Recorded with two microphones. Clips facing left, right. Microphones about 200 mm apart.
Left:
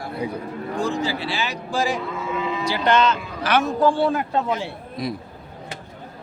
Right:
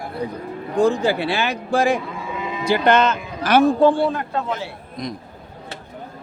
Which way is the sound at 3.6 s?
30° right (ahead or behind).